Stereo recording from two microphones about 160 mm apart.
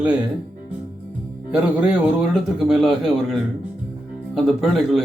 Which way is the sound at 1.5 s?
5° right (ahead or behind).